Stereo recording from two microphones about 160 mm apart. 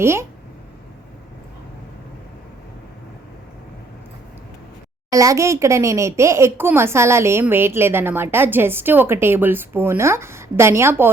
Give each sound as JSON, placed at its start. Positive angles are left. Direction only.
{"t": 0.0, "sound": "speech", "side_deg": -15}
{"t": 5.1, "sound": "speech", "side_deg": -20}